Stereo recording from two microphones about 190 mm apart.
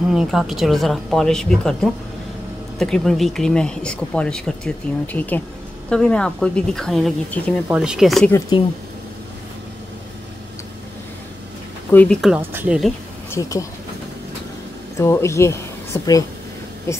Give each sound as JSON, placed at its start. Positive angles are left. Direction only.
{"t": 0.1, "sound": "speech", "side_deg": -5}
{"t": 8.5, "sound": "speech", "side_deg": 25}
{"t": 11.9, "sound": "speech", "side_deg": 5}
{"t": 12.4, "sound": "speech", "side_deg": -10}
{"t": 13.3, "sound": "speech", "side_deg": 15}
{"t": 15.0, "sound": "a woman's voice", "side_deg": 15}